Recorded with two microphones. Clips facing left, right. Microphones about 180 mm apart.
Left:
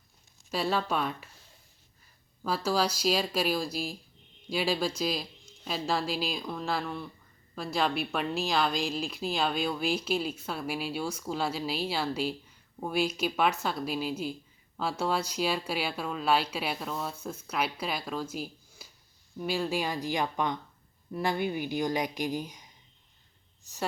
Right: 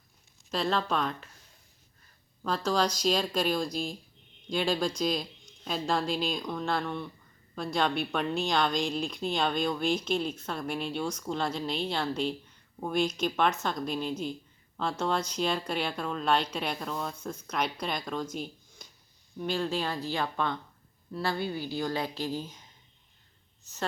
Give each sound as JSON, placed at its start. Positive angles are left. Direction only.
{"t": 0.5, "sound": "speech", "side_deg": 10}
{"t": 2.4, "sound": "a woman's voice", "side_deg": 5}